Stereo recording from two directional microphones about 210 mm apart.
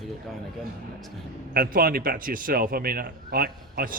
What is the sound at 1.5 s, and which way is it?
A man's voice, 45° right (ahead or behind).